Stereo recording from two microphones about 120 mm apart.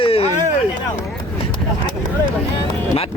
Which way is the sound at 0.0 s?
55° left (ahead or behind).